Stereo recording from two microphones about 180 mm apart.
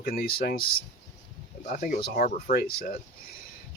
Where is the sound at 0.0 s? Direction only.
60° left (ahead or behind).